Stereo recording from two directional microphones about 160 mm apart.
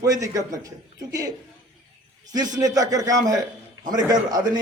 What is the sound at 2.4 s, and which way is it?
A man's voice, 25° right (ahead or behind).